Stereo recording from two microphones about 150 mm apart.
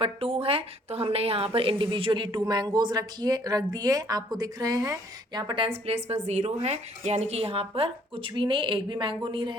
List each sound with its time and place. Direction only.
0.0 s a woman's voice: 40° right (ahead or behind)